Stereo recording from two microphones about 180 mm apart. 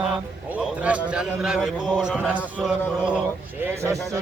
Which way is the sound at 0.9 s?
5° right (ahead or behind).